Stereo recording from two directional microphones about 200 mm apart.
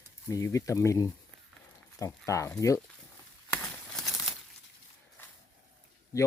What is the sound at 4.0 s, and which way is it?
Crumpling, centre (ahead or behind).